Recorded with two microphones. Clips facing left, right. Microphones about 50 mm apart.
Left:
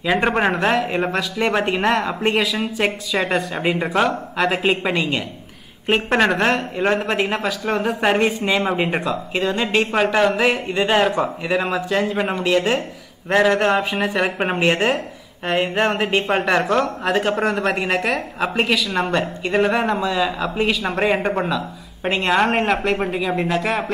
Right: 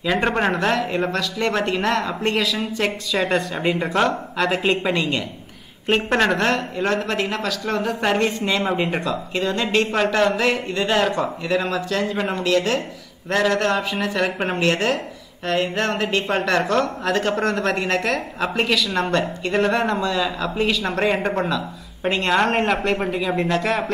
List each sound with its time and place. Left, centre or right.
0.0 s speech: centre
6.8 s speech: centre